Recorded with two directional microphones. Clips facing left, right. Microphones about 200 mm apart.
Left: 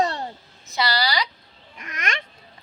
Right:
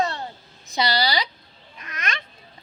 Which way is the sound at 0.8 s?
20° right (ahead or behind).